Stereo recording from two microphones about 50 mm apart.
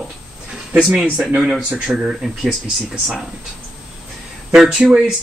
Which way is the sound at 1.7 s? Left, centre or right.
Centre.